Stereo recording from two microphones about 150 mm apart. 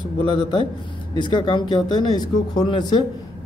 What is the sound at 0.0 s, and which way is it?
A man's voice, 30° left (ahead or behind).